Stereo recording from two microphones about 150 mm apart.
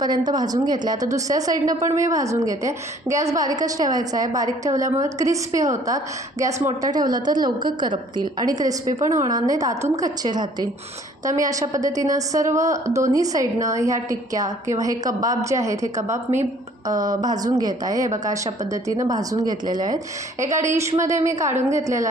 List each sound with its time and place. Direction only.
0.3 s a woman's voice: 25° right (ahead or behind)
7.1 s a woman's voice: 25° right (ahead or behind)